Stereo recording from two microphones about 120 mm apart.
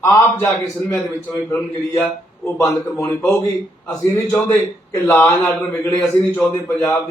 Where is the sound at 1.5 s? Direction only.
20° left (ahead or behind).